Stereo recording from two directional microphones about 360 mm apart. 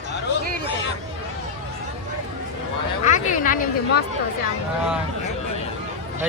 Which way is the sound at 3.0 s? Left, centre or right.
Left.